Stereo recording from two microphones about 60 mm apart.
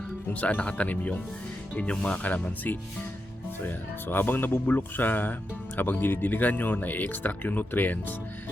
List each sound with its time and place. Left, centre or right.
0.3 s speech: left
4.1 s speech: left